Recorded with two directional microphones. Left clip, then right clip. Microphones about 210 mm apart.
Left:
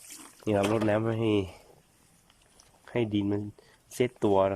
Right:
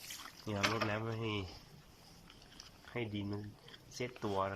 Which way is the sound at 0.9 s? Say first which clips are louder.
Left 13 dB; 55° left (ahead or behind).